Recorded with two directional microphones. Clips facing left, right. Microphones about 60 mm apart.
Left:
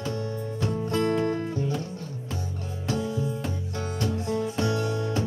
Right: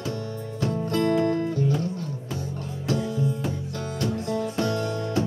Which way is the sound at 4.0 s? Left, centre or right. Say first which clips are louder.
Right 1 dB; centre.